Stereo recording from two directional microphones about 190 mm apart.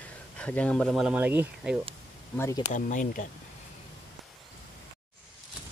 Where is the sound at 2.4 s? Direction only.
15° left (ahead or behind).